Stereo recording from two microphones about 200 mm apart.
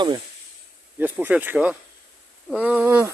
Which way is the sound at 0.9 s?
10° right (ahead or behind).